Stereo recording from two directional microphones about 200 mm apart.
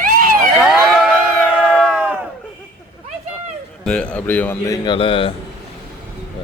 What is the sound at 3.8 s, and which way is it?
Speech, 5° left (ahead or behind).